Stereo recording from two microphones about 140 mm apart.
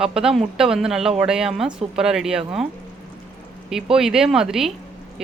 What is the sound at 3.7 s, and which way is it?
Speech, 5° right (ahead or behind).